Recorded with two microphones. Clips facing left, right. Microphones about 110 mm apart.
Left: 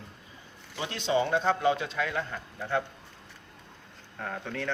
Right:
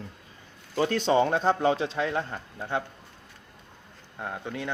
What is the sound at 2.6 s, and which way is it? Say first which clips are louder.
Speech: left 1 dB; 20° right (ahead or behind).